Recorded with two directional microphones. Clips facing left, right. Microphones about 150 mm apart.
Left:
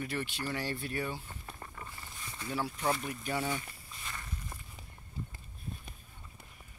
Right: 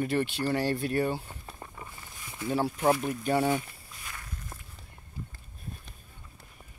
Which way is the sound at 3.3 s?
60° right (ahead or behind).